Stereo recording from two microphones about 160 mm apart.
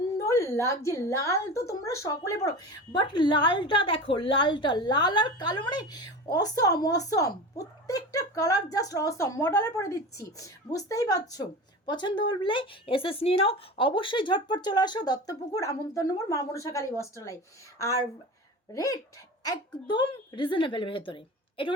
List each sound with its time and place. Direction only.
0.3 s a woman's voice: 15° left (ahead or behind)